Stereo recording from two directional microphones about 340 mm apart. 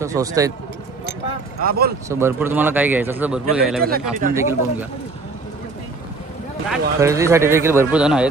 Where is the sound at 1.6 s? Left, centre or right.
Right.